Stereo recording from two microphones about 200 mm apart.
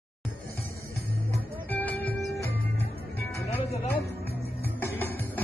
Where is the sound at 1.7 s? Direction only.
10° left (ahead or behind).